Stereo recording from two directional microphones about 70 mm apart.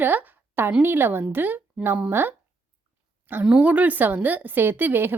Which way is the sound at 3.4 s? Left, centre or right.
Centre.